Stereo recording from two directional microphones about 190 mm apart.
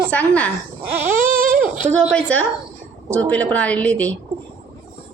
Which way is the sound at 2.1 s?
5° left (ahead or behind).